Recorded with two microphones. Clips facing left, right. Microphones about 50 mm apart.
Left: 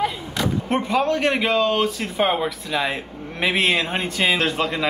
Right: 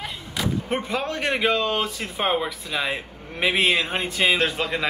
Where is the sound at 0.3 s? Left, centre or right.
Centre.